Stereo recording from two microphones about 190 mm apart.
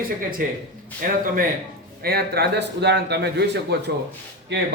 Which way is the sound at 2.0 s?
55° right (ahead or behind).